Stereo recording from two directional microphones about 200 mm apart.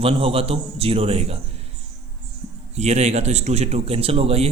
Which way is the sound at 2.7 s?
35° right (ahead or behind).